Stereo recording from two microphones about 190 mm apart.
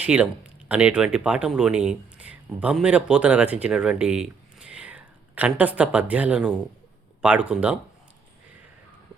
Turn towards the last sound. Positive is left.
turn(degrees=-5)  # may be behind; listen again after turning